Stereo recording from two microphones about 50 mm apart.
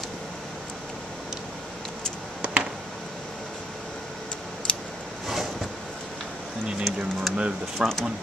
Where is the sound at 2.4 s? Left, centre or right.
Right.